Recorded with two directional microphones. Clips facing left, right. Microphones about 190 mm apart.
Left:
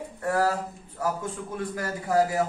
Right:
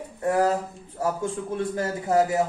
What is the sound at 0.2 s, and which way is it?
Speech, 20° right (ahead or behind).